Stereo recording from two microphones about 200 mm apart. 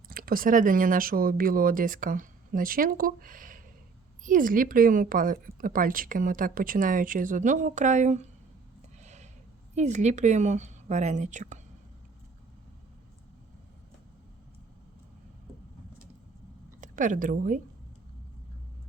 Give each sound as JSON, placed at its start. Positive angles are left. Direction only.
{"t": 0.1, "sound": "a woman's voice", "side_deg": -45}
{"t": 9.0, "sound": "a sound", "side_deg": -35}
{"t": 9.7, "sound": "a woman's voice", "side_deg": -35}
{"t": 16.8, "sound": "a woman's voice", "side_deg": -40}